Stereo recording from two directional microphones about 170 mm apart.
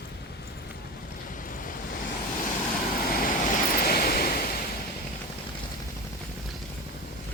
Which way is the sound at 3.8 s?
60° left (ahead or behind).